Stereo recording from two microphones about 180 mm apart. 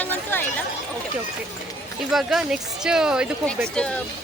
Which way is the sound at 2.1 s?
Centre (ahead or behind).